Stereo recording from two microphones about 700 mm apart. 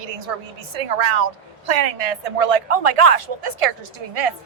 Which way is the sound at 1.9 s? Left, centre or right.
Right.